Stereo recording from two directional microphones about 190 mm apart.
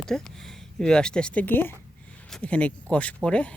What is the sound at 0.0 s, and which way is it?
Speech, 5° left (ahead or behind).